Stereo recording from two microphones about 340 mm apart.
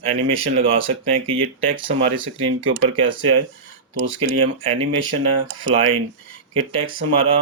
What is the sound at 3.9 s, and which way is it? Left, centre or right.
Speech, right.